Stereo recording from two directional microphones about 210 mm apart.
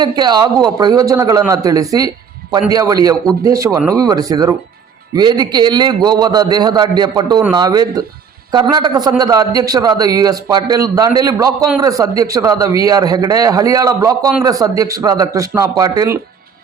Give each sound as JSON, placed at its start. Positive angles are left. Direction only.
{"t": 0.0, "sound": "a man's voice", "side_deg": -20}